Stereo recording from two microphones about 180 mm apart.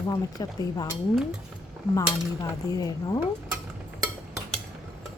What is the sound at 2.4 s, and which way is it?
Speech, 20° left (ahead or behind).